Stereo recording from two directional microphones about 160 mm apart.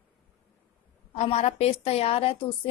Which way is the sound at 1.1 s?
40° left (ahead or behind).